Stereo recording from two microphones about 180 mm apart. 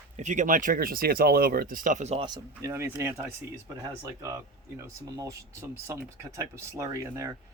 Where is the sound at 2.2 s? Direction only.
20° right (ahead or behind).